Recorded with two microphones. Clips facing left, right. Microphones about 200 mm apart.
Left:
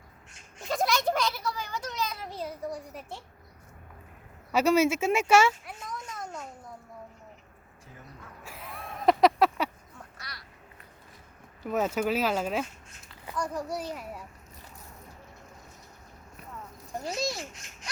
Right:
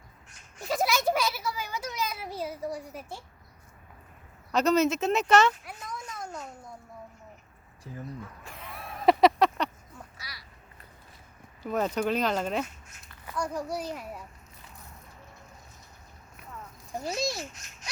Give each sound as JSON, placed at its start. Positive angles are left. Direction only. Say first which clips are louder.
{"t": 0.6, "sound": "a sound", "louder": "right 1 dB", "side_deg": -5}
{"t": 4.5, "sound": "speech", "louder": "left 1 dB", "side_deg": 10}
{"t": 7.9, "sound": "speech", "louder": "right 10 dB", "side_deg": -35}
{"t": 8.4, "sound": "vehicle", "louder": "left 1 dB", "side_deg": 5}
{"t": 10.2, "sound": "quack", "louder": "left 1 dB", "side_deg": -5}
{"t": 11.6, "sound": "a child's voice", "louder": "even", "side_deg": 5}